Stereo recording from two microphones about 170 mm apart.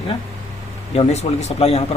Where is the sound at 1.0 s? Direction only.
40° left (ahead or behind).